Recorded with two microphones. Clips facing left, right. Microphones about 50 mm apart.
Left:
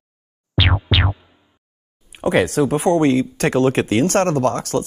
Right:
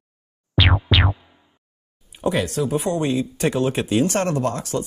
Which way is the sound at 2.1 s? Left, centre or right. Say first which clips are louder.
Left 5 dB; left.